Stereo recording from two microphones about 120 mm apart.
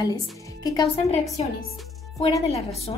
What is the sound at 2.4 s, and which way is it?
Speech, 60° left (ahead or behind).